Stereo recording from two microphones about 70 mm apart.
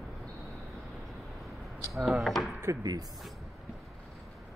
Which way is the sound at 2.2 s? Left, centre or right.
Centre.